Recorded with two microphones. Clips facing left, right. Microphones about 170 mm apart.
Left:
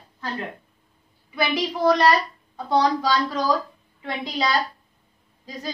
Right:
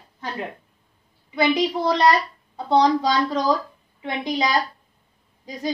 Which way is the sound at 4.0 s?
20° right (ahead or behind).